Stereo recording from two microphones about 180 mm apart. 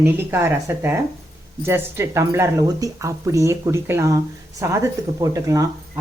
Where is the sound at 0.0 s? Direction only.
15° right (ahead or behind).